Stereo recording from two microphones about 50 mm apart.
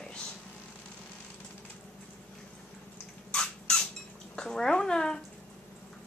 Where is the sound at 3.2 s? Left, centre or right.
Centre.